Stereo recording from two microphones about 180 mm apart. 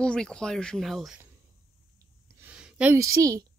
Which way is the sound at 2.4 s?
5° right (ahead or behind).